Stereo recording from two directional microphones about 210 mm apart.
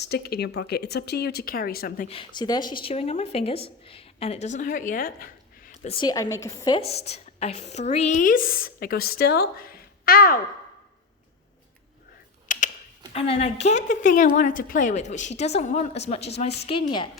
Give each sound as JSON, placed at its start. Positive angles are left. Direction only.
{"t": 0.0, "sound": "a woman's voice", "side_deg": 50}
{"t": 2.0, "sound": "speech", "side_deg": 25}
{"t": 5.9, "sound": "a woman's voice", "side_deg": 20}
{"t": 6.7, "sound": "a woman's voice", "side_deg": 30}
{"t": 12.5, "sound": "typing", "side_deg": 35}
{"t": 13.1, "sound": "a woman's voice", "side_deg": 30}